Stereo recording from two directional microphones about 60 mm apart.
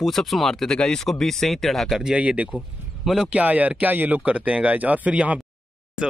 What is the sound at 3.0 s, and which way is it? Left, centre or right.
Speech, centre.